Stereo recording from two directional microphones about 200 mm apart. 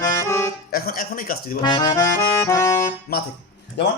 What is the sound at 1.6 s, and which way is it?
Accordion, 25° left (ahead or behind).